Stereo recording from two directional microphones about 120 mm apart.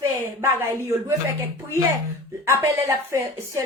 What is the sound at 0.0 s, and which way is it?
Speech, 20° right (ahead or behind).